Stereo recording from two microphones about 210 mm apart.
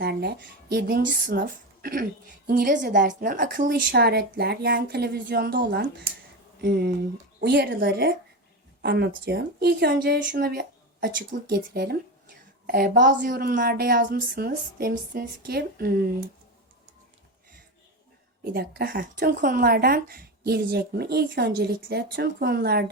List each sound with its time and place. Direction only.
0.0 s a woman's voice: 50° right (ahead or behind)
18.5 s a woman's voice: 50° right (ahead or behind)